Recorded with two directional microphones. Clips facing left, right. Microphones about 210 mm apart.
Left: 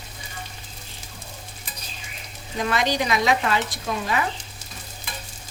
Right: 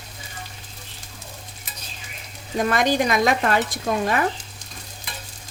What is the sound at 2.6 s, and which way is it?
Speech, 50° right (ahead or behind).